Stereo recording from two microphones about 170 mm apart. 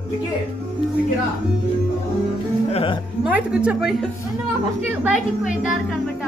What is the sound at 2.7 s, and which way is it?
Speech, 35° left (ahead or behind).